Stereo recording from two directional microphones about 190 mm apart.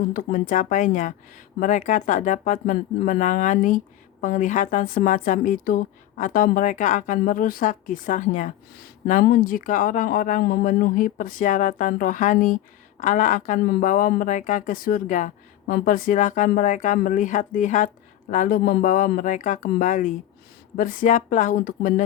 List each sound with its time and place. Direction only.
0.1 s a woman's voice: 45° left (ahead or behind)